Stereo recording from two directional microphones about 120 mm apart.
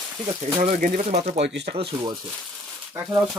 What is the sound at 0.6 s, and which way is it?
Speech, 60° right (ahead or behind).